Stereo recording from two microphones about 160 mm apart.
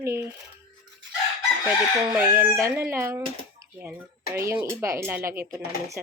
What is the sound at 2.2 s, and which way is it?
Speech, 15° right (ahead or behind).